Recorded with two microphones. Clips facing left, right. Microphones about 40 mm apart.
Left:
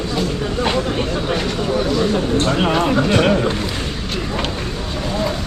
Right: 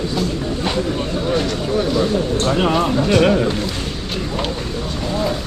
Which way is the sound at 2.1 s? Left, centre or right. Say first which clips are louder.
Left 1 dB; centre.